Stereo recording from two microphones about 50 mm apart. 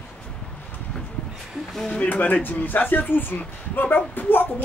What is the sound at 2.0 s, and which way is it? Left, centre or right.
Speech, left.